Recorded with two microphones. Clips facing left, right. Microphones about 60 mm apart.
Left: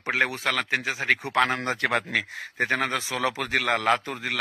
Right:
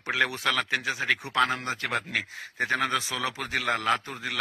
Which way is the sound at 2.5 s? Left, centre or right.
Left.